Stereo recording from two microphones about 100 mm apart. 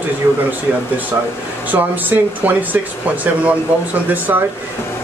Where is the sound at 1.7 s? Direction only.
20° right (ahead or behind).